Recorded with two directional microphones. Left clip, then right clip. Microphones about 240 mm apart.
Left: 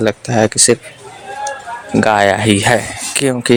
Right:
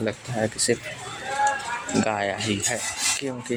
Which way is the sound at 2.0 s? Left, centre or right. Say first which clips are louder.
Left 15 dB; left.